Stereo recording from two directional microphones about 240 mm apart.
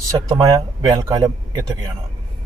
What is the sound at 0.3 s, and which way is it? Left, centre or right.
Speech, centre.